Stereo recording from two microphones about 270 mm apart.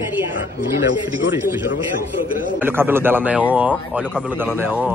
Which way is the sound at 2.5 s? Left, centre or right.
Centre.